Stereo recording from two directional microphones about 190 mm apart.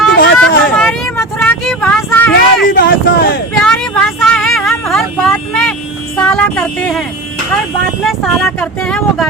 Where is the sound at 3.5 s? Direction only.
5° left (ahead or behind).